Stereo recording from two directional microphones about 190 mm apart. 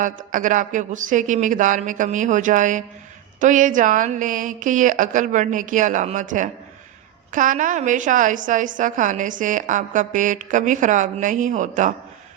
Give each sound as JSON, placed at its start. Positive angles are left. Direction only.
{"t": 0.0, "sound": "a woman's voice", "side_deg": -45}